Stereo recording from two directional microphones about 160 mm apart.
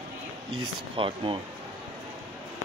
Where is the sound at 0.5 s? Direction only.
35° right (ahead or behind).